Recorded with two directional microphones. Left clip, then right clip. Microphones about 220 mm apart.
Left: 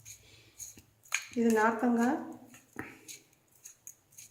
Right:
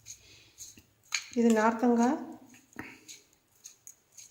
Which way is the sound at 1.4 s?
40° right (ahead or behind).